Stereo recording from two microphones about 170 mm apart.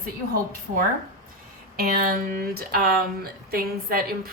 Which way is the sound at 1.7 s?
60° right (ahead or behind).